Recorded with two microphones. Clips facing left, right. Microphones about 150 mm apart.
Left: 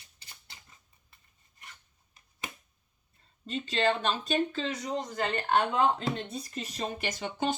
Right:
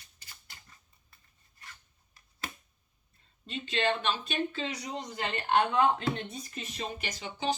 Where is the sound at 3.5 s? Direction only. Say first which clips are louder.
Left 2 dB; 40° left (ahead or behind).